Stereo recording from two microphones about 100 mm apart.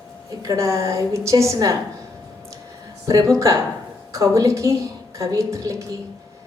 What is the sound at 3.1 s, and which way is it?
A woman's voice, 35° right (ahead or behind).